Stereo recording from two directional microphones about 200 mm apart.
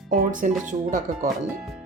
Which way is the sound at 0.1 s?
40° right (ahead or behind).